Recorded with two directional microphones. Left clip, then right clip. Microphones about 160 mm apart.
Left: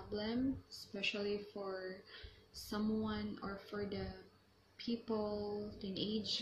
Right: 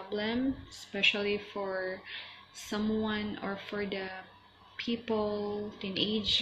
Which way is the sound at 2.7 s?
15° left (ahead or behind).